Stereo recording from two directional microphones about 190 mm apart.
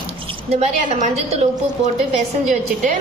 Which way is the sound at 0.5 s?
40° right (ahead or behind).